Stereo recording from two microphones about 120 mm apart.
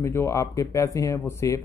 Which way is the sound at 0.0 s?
25° left (ahead or behind).